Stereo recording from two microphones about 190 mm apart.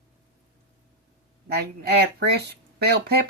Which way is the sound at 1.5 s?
55° right (ahead or behind).